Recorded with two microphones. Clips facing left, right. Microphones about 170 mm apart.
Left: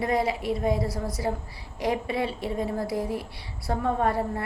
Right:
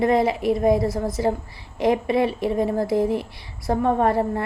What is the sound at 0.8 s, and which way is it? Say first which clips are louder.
Speech: right 7 dB; 50° right (ahead or behind).